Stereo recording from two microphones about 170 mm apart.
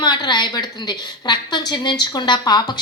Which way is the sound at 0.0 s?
25° left (ahead or behind).